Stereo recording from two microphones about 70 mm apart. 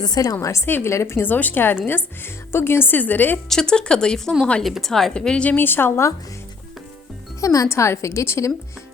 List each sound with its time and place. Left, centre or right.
0.0 s speech: left
0.6 s a woman's voice: left
3.5 s speech: centre
5.5 s speech: left
7.4 s a woman's voice: left